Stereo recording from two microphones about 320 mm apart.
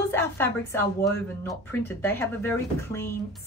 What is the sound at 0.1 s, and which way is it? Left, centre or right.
A woman's voice, centre.